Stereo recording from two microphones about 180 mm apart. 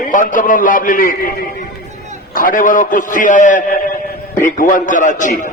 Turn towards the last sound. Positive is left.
turn(degrees=45)  # may be behind; listen again after turning